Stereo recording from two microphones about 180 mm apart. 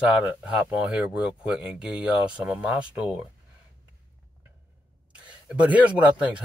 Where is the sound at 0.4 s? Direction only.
5° right (ahead or behind).